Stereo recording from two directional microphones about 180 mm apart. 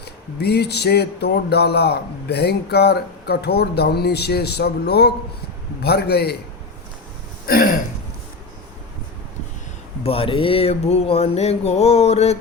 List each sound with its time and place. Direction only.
0.0 s speech: 65° left (ahead or behind)
7.4 s throat clearing: 55° left (ahead or behind)
10.0 s a sound: 30° left (ahead or behind)